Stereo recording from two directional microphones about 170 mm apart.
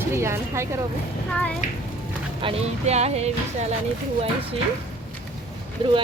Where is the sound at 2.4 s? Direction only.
35° right (ahead or behind).